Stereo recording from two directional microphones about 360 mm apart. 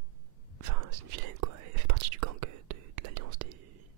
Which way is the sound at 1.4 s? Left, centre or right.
Right.